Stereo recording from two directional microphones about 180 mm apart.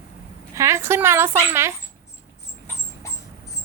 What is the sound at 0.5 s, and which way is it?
Speech, 15° right (ahead or behind).